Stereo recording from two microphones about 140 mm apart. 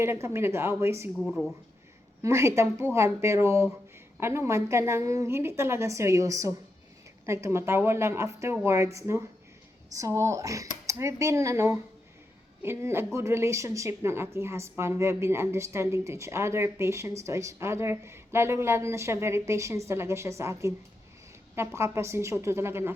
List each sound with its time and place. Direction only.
0.0 s a woman's voice: 20° right (ahead or behind)
1.2 s speech: centre (ahead or behind)
2.2 s a woman's voice: 20° right (ahead or behind)